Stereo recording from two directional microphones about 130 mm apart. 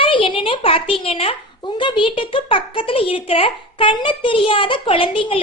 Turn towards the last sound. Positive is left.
turn(degrees=45)  # may be behind; listen again after turning